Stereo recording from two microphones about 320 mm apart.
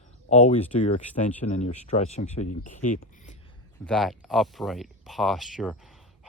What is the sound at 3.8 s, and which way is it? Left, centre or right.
Speech, centre.